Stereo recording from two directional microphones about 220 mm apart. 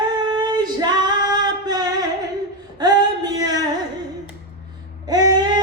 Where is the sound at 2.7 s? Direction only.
20° right (ahead or behind).